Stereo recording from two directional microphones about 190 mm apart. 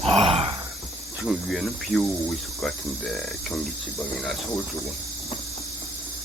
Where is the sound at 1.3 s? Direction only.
Centre (ahead or behind).